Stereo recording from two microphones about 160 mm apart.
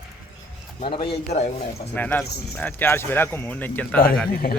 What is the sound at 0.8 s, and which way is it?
Speech, 40° left (ahead or behind).